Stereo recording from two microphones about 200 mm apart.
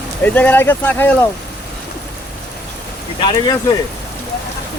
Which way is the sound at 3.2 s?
25° left (ahead or behind).